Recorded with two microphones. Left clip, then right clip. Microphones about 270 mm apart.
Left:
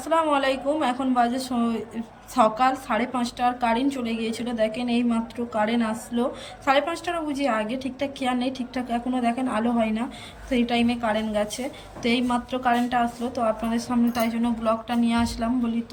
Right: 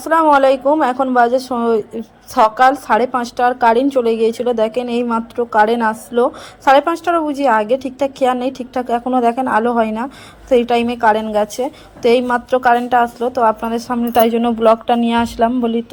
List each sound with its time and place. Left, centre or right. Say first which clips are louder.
0.0 s a woman's voice: right 11 dB; centre